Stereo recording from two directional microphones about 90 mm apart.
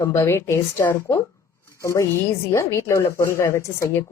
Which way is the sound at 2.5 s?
35° left (ahead or behind).